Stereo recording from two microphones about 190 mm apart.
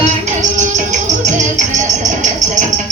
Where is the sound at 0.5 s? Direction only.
40° right (ahead or behind).